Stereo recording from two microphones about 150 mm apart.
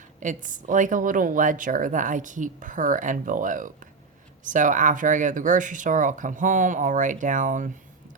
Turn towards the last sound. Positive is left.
turn(degrees=-60)  # may be behind; listen again after turning